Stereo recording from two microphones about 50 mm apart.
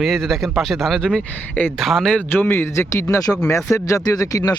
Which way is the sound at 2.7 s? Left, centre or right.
Left.